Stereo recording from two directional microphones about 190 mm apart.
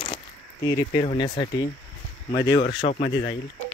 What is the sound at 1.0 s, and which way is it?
Speech, 30° left (ahead or behind).